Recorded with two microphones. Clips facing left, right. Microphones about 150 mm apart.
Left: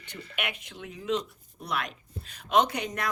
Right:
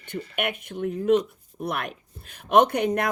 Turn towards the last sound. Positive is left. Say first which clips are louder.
# right 6 dB
turn(degrees=-55)  # may be behind; listen again after turning